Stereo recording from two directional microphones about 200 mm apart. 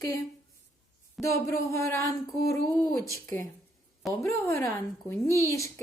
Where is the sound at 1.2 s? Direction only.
15° left (ahead or behind).